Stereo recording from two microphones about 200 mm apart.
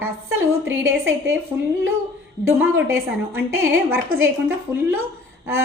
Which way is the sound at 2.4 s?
10° right (ahead or behind).